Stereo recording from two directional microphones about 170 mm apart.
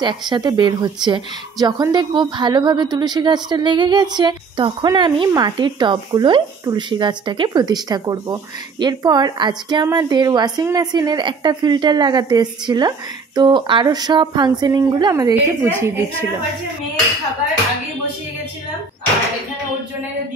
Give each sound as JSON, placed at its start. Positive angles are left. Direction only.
{"t": 0.0, "sound": "a woman's voice", "side_deg": -25}